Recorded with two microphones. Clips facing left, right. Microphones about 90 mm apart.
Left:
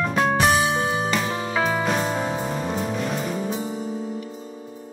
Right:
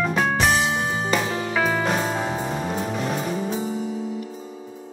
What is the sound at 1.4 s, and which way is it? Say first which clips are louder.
Music: even; 20° left (ahead or behind).